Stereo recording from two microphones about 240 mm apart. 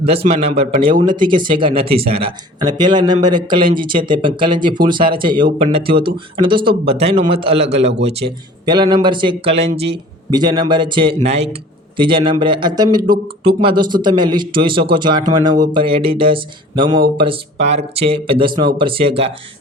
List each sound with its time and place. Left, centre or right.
0.0 s speech: right